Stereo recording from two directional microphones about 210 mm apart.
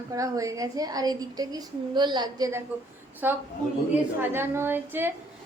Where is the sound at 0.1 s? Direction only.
15° right (ahead or behind).